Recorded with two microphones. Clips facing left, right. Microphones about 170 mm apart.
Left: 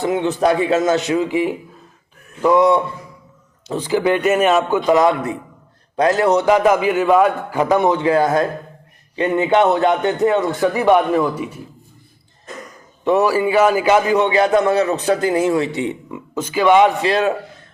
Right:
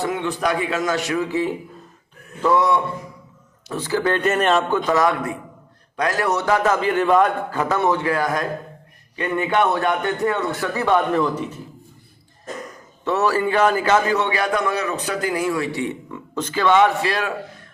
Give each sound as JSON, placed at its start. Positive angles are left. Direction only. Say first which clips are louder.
{"t": 0.0, "sound": "a man's voice", "louder": "left 6 dB", "side_deg": 20}
{"t": 13.1, "sound": "a man's voice", "louder": "left 4 dB", "side_deg": 10}
{"t": 16.3, "sound": "a man's voice", "louder": "left 4 dB", "side_deg": 10}